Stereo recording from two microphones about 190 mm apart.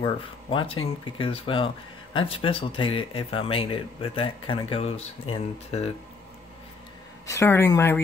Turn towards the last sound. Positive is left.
turn(degrees=15)  # may be behind; listen again after turning